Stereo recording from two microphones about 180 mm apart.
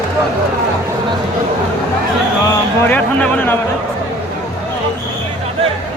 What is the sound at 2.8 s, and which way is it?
Speech, 10° left (ahead or behind).